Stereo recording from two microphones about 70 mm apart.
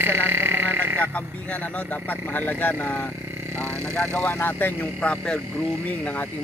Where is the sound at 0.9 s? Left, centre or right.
Centre.